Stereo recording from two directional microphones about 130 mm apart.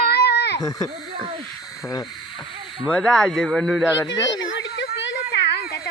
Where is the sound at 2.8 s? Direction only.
10° left (ahead or behind).